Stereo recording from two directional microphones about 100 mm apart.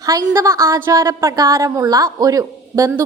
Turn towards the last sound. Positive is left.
turn(degrees=-35)  # may be behind; listen again after turning